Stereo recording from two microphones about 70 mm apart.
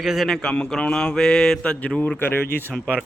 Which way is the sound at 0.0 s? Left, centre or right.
Centre.